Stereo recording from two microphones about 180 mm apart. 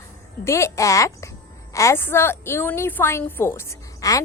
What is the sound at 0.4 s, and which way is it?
A woman's voice, 15° left (ahead or behind).